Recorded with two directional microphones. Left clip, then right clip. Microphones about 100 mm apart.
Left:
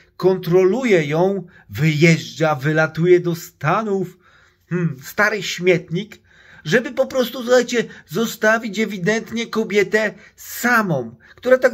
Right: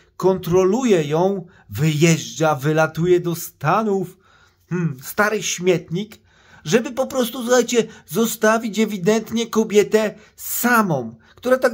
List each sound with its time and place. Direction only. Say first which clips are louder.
0.2 s speech: left 2 dB; 35° right (ahead or behind)